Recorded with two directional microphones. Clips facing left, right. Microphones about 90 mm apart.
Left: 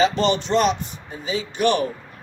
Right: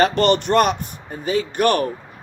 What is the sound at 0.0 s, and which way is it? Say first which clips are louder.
Speech: right 3 dB; 60° right (ahead or behind).